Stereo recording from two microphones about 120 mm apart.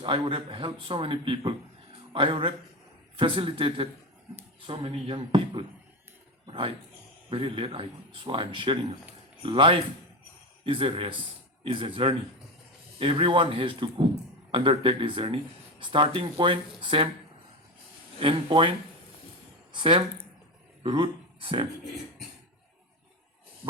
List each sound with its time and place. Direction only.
0.0 s a man's voice: 50° right (ahead or behind)
18.2 s speech: 50° right (ahead or behind)
19.7 s speech: 40° right (ahead or behind)